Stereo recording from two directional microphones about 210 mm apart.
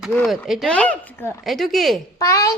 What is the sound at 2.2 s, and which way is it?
Speech, 15° left (ahead or behind).